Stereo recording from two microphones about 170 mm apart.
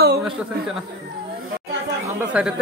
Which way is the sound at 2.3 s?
5° right (ahead or behind).